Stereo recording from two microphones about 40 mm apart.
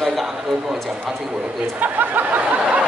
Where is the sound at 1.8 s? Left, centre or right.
Right.